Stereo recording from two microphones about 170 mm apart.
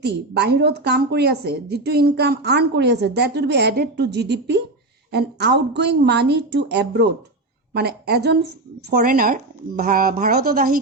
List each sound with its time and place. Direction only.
0.0 s a woman's voice: 80° right
8.9 s speech: 60° right (ahead or behind)